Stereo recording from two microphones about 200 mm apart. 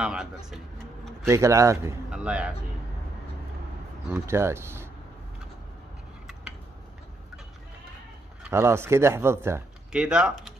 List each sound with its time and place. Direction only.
0.0 s speech: 5° right (ahead or behind)
1.2 s speech: 15° right (ahead or behind)
4.1 s speech: 15° right (ahead or behind)
8.4 s speech: 10° right (ahead or behind)